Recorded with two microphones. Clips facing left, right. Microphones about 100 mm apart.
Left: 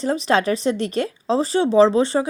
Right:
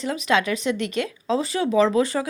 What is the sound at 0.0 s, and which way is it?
A woman's voice, 35° left (ahead or behind).